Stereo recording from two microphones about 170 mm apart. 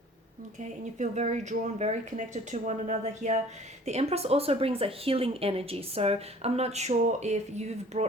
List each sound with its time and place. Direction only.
0.6 s speech: 45° right (ahead or behind)